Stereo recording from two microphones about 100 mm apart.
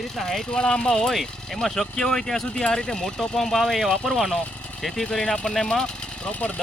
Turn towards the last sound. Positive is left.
turn(degrees=15)  # may be behind; listen again after turning